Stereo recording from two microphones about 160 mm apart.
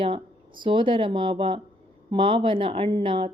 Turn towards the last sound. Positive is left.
turn(degrees=-30)  # may be behind; listen again after turning